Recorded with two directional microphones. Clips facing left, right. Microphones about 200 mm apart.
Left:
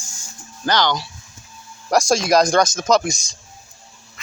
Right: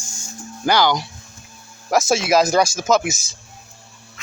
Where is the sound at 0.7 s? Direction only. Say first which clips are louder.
Right 2 dB; 10° right (ahead or behind).